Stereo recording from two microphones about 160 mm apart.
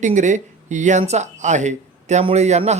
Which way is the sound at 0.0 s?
50° right (ahead or behind).